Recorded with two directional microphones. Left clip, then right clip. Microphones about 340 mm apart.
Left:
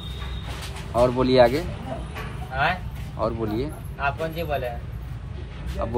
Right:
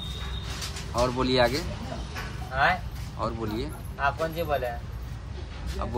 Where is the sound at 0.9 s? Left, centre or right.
Centre.